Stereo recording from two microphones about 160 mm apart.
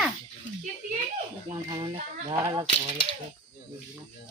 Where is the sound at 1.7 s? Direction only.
30° right (ahead or behind).